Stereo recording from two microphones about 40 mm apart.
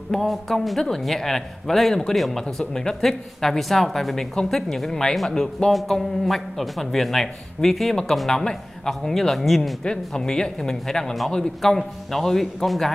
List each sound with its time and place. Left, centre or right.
0.1 s a man's voice: centre
2.7 s a man's voice: centre
5.7 s a man's voice: centre
9.8 s a man's voice: centre